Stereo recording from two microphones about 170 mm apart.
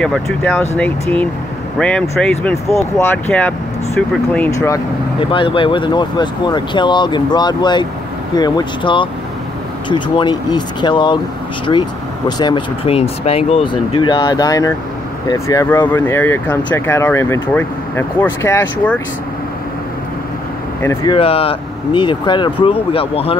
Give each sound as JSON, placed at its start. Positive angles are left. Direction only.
{"t": 0.0, "sound": "speech", "side_deg": 5}
{"t": 5.2, "sound": "speech", "side_deg": 30}
{"t": 20.8, "sound": "speech", "side_deg": 15}
{"t": 21.1, "sound": "speech", "side_deg": 35}